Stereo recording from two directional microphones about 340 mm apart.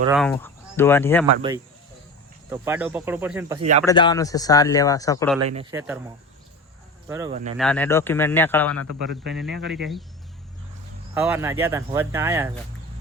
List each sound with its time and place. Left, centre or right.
0.1 s speech: centre
1.4 s speech: centre
3.6 s speech: centre
3.8 s speech: centre
5.5 s speech: centre
7.1 s speech: centre
7.6 s speech: centre
11.1 s speech: centre